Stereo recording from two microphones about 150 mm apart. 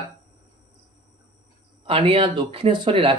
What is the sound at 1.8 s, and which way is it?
Speech, 35° right (ahead or behind).